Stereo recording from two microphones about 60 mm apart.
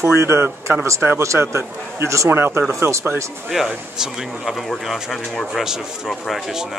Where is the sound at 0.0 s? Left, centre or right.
Right.